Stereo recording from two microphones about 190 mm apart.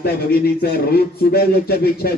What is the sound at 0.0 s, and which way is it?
A man's voice, 55° left (ahead or behind).